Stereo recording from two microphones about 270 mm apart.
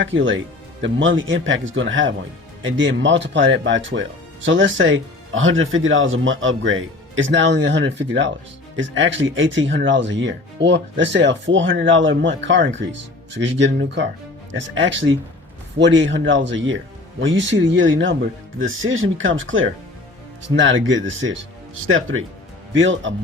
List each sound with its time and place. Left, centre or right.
0.0 s speech: right